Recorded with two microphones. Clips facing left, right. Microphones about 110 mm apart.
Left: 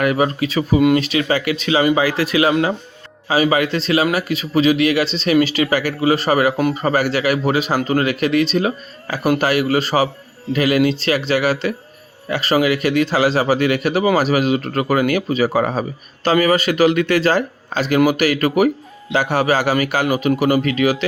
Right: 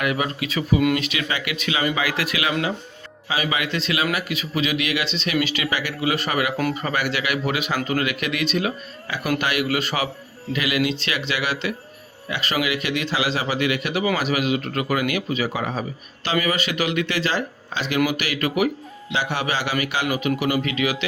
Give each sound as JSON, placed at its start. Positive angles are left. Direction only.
{"t": 0.0, "sound": "a man's voice", "side_deg": 40}